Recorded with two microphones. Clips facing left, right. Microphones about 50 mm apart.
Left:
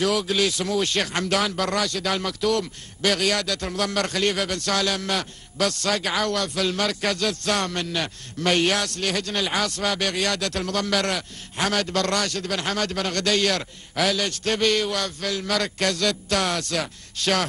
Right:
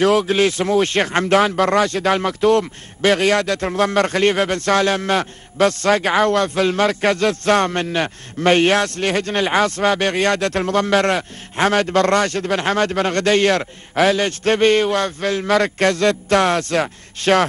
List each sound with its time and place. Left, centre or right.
0.0 s speech: right